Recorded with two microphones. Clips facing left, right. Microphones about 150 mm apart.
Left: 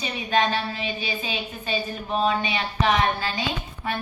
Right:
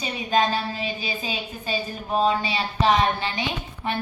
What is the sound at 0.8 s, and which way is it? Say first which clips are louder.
A woman's voice: even; 40° right (ahead or behind).